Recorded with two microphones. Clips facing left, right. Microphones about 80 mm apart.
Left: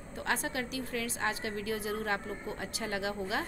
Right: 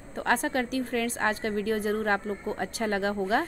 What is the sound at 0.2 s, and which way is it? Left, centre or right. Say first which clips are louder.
A woman's voice: right 7 dB; right.